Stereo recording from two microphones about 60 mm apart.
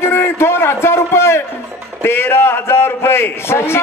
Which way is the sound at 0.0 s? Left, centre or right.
Left.